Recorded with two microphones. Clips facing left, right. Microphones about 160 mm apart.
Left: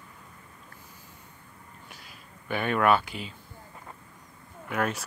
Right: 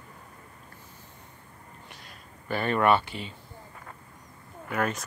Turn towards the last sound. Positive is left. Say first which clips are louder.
# even
turn(degrees=0)  # may be behind; listen again after turning